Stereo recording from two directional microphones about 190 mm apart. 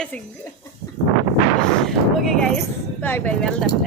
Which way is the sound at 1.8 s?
Centre (ahead or behind).